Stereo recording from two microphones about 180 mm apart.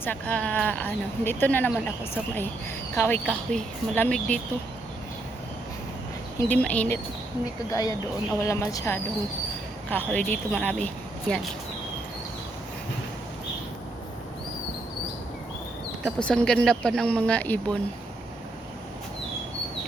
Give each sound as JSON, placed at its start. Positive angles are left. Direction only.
{"t": 0.0, "sound": "a woman's voice", "side_deg": 10}
{"t": 2.9, "sound": "a woman's voice", "side_deg": 15}
{"t": 6.5, "sound": "a woman's voice", "side_deg": 10}
{"t": 16.0, "sound": "speech", "side_deg": 5}